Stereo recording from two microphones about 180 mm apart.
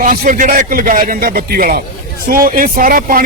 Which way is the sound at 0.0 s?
50° right (ahead or behind).